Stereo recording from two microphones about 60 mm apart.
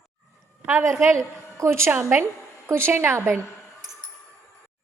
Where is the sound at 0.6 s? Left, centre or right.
Right.